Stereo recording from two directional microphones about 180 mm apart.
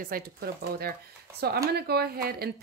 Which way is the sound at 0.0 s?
55° right (ahead or behind).